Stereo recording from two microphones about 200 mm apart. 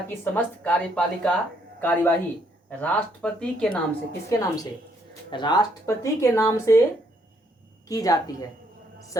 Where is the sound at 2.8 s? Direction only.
5° left (ahead or behind).